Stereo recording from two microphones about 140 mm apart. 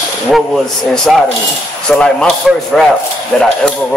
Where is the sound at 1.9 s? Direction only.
5° left (ahead or behind).